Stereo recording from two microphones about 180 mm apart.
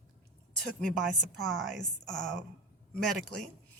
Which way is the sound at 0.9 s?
Centre (ahead or behind).